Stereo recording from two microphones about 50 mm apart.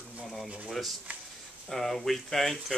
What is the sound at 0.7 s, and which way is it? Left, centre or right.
Speech, centre.